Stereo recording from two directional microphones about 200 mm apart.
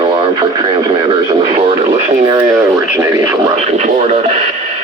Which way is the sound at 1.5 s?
25° right (ahead or behind).